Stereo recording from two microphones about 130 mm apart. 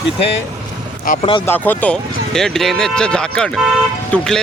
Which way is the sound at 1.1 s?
90° left.